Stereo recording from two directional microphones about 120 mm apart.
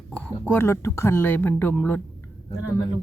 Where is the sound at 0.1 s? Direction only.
10° left (ahead or behind).